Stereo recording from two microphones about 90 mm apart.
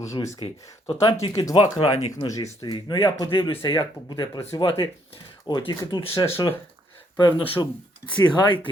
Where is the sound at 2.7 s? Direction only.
55° left (ahead or behind).